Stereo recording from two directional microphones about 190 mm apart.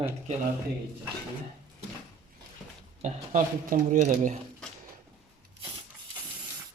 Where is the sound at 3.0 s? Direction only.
40° right (ahead or behind).